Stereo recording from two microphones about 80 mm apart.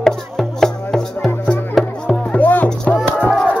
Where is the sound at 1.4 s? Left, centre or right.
Left.